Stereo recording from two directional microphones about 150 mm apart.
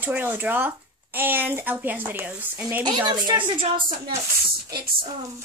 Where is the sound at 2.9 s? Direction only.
30° right (ahead or behind).